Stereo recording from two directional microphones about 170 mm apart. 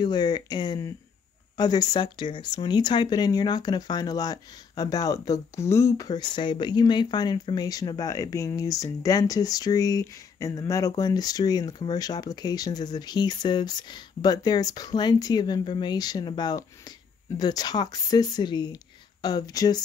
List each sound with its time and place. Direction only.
0.0 s speech: 25° left (ahead or behind)